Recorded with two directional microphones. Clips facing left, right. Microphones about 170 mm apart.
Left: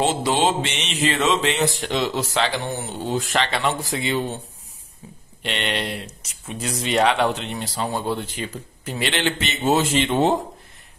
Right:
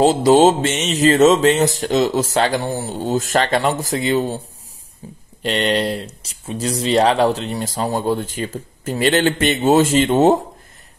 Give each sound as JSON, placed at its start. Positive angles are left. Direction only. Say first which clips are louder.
{"t": 0.0, "sound": "speech", "louder": "right 9 dB", "side_deg": -40}
{"t": 5.0, "sound": "speech", "louder": "right 7 dB", "side_deg": -30}